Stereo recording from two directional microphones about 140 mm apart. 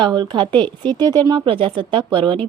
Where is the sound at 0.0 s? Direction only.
35° right (ahead or behind).